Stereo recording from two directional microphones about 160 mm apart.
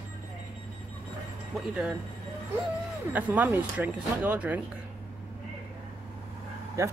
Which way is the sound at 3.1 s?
10° right (ahead or behind).